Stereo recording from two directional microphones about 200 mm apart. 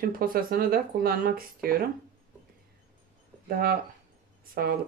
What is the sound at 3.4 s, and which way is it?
Speech, 45° right (ahead or behind).